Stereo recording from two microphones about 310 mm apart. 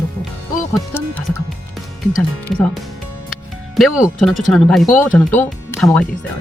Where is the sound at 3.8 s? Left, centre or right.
Centre.